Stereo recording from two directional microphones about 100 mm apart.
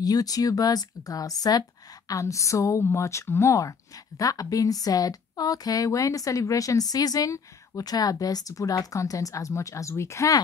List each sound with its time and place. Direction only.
0.0 s a woman's voice: 40° left (ahead or behind)